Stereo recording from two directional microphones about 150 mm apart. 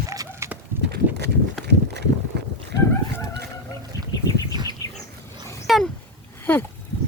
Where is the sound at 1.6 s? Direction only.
90° right.